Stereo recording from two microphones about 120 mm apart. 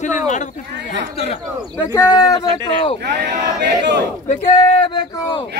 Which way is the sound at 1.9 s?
30° left (ahead or behind).